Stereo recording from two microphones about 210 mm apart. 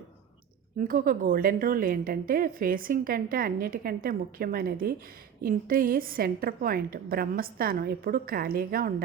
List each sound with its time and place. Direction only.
0.8 s a woman's voice: 40° right (ahead or behind)